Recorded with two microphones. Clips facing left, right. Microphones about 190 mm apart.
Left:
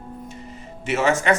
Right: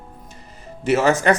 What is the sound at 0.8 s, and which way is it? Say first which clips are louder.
Speech: right 4 dB; 35° right (ahead or behind).